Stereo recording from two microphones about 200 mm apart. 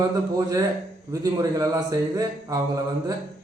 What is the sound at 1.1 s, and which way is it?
Speech, 15° right (ahead or behind).